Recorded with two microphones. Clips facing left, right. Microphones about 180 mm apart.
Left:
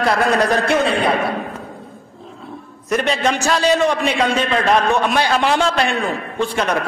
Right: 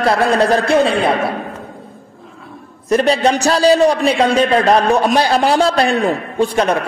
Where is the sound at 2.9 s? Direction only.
35° right (ahead or behind).